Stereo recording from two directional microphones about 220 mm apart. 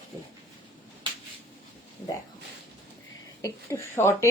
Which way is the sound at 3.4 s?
10° left (ahead or behind).